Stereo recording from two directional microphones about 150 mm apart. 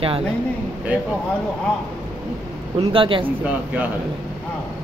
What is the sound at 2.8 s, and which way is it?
Speech, 35° right (ahead or behind).